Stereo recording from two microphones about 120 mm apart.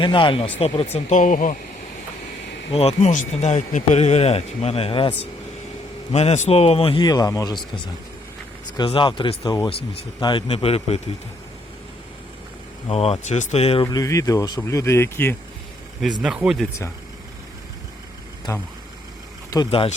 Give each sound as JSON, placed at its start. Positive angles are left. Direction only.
{"t": 0.0, "sound": "a man's voice", "side_deg": 45}
{"t": 0.9, "sound": "speech", "side_deg": 90}
{"t": 2.7, "sound": "speech", "side_deg": 70}
{"t": 6.1, "sound": "speech", "side_deg": 65}
{"t": 7.0, "sound": "speech", "side_deg": 35}
{"t": 8.8, "sound": "speech", "side_deg": 40}
{"t": 10.5, "sound": "a man's voice", "side_deg": 55}
{"t": 12.9, "sound": "speech", "side_deg": 55}
{"t": 13.9, "sound": "speech", "side_deg": 30}
{"t": 16.2, "sound": "speech", "side_deg": -5}
{"t": 18.5, "sound": "speech", "side_deg": 30}